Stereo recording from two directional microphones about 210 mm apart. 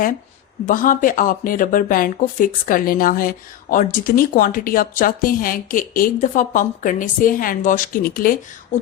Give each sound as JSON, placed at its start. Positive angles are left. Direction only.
{"t": 0.6, "sound": "speech", "side_deg": 40}